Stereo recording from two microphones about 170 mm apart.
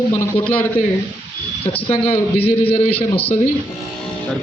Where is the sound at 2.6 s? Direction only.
35° left (ahead or behind).